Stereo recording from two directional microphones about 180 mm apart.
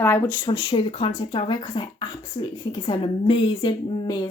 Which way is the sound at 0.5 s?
30° left (ahead or behind).